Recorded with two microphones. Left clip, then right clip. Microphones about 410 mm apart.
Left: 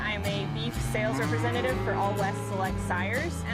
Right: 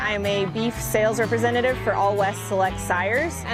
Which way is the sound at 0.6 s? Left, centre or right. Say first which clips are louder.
Right 8 dB; right.